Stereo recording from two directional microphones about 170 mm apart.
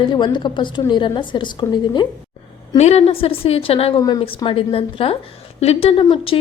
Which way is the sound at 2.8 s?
40° left (ahead or behind).